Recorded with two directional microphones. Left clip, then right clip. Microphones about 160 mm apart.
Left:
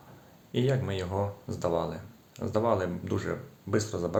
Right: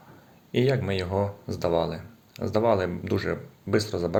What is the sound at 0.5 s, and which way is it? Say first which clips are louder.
Speech: right 5 dB; 15° right (ahead or behind).